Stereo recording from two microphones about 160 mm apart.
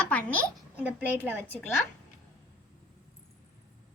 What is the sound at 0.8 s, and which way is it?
Speech, 10° right (ahead or behind).